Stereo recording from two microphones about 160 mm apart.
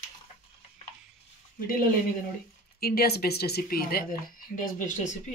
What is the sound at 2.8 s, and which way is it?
Speech, 75° left (ahead or behind).